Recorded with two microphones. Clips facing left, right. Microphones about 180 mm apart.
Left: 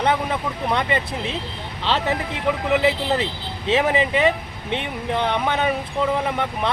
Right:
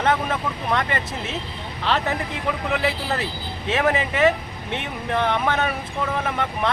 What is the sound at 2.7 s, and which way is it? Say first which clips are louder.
Speech: left 6 dB; 20° left (ahead or behind).